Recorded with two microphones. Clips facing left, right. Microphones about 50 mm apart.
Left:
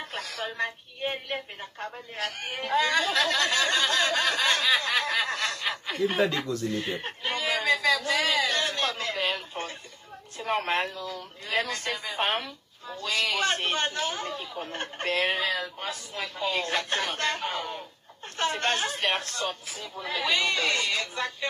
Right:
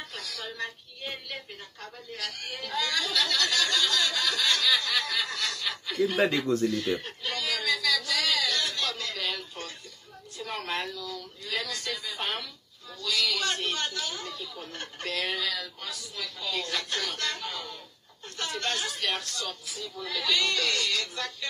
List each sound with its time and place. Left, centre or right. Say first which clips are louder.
0.1 s a woman's voice: left 5 dB; left
6.6 s a sound: right 2 dB; left
10.3 s a woman's voice: left 6 dB; left